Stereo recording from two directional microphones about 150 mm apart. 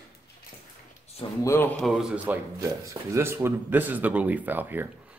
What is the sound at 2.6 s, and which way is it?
Speech, 20° right (ahead or behind).